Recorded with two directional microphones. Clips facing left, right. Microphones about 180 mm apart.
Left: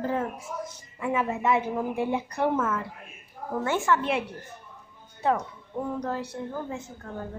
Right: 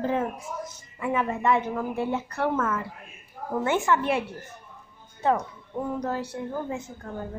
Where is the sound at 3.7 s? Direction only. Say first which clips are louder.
Right 1 dB; 15° right (ahead or behind).